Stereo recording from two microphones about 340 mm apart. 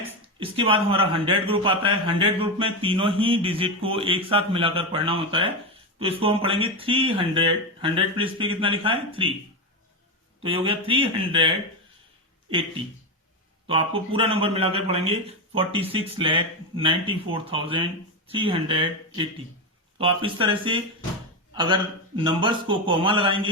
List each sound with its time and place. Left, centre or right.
0.0 s speech: centre
10.4 s speech: centre